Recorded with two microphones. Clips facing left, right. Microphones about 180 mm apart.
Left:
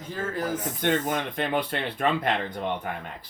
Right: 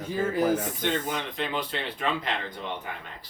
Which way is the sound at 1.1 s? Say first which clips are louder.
Left 4 dB; 55° left (ahead or behind).